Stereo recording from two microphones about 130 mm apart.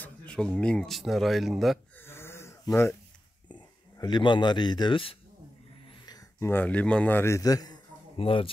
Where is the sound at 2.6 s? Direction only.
20° left (ahead or behind).